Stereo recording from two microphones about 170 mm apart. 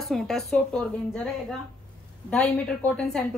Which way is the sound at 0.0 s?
Centre (ahead or behind).